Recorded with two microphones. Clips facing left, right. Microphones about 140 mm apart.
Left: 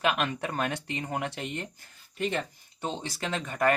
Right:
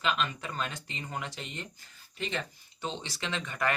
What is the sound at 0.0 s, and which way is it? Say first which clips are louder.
Speech: left 4 dB; 60° left (ahead or behind).